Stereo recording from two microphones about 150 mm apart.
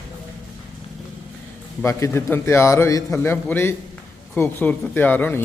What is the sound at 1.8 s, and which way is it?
Speech, 15° left (ahead or behind).